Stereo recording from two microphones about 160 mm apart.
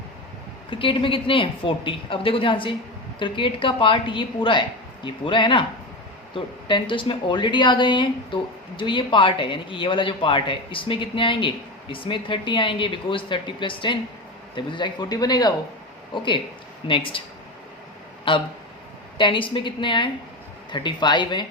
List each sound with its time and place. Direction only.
0.7 s speech: 35° left (ahead or behind)
18.3 s speech: 30° left (ahead or behind)